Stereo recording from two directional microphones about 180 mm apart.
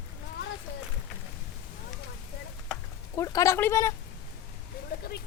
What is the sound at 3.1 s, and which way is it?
Speech, 20° left (ahead or behind).